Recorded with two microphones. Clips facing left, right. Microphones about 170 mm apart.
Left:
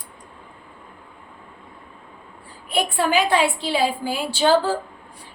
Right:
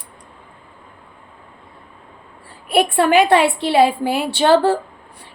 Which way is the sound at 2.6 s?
65° right (ahead or behind).